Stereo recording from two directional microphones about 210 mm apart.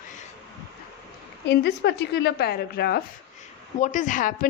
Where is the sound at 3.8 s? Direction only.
35° left (ahead or behind).